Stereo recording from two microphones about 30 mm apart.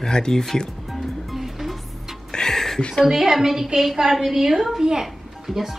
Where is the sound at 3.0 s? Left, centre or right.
Centre.